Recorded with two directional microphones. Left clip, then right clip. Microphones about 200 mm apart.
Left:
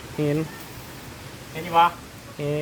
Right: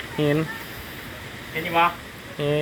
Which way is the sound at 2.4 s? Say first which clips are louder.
Right 4 dB; 5° left (ahead or behind).